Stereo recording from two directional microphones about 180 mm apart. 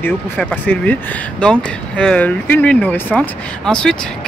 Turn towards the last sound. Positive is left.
turn(degrees=5)  # may be behind; listen again after turning